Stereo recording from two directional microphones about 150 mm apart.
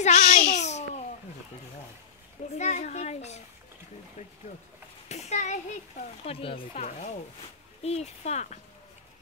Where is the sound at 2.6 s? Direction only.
50° left (ahead or behind).